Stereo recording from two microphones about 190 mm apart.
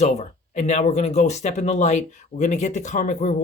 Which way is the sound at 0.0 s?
35° left (ahead or behind).